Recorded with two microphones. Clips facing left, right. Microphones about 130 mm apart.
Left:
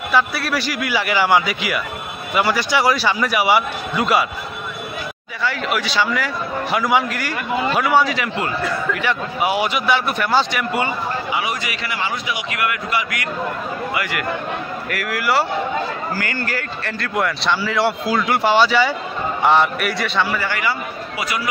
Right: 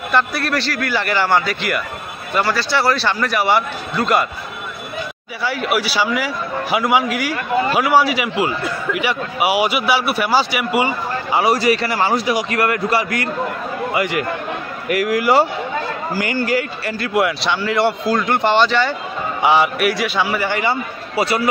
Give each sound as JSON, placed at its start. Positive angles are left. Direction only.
{"t": 0.1, "sound": "a man's voice", "side_deg": 5}
{"t": 5.4, "sound": "a man's voice", "side_deg": -10}
{"t": 11.3, "sound": "a man's voice", "side_deg": -35}
{"t": 13.9, "sound": "a man's voice", "side_deg": -25}
{"t": 19.4, "sound": "a man's voice", "side_deg": -5}